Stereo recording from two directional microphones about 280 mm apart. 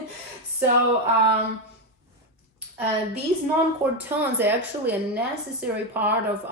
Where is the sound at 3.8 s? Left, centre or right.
Centre.